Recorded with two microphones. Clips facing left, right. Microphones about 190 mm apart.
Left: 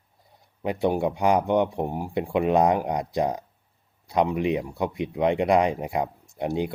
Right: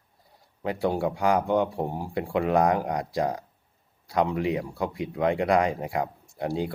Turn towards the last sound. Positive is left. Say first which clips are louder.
# left 2 dB
turn(degrees=20)  # may be behind; listen again after turning